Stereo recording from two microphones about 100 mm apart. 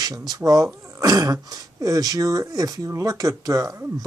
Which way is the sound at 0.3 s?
35° right (ahead or behind).